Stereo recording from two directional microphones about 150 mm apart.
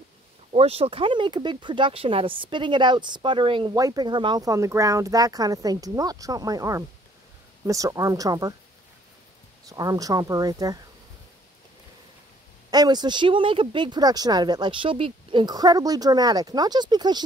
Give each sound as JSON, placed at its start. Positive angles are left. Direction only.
{"t": 0.5, "sound": "speech", "side_deg": -40}
{"t": 9.7, "sound": "speech", "side_deg": -25}
{"t": 12.7, "sound": "speech", "side_deg": -25}